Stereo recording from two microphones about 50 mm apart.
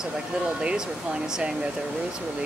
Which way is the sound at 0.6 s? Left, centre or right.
Centre.